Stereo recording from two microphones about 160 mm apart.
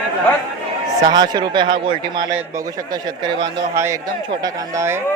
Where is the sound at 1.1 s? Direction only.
25° right (ahead or behind).